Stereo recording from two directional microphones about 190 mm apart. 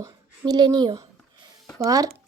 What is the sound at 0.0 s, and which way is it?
A woman's voice, 20° right (ahead or behind).